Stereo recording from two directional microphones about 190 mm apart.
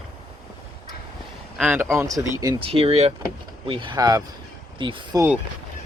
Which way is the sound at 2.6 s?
30° right (ahead or behind).